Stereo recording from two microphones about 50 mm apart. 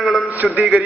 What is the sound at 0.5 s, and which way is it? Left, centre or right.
Speech, right.